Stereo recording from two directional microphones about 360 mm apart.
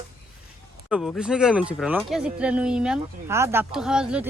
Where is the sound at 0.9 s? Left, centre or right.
Centre.